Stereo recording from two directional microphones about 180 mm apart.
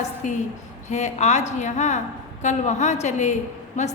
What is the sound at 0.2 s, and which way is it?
A woman's voice, 45° left (ahead or behind).